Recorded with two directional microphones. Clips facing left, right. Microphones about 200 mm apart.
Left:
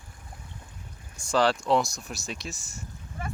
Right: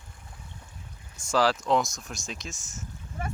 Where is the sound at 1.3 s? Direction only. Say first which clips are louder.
Left 1 dB; centre (ahead or behind).